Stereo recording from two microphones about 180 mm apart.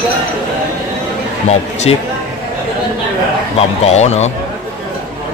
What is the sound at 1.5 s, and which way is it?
Speech, 35° left (ahead or behind).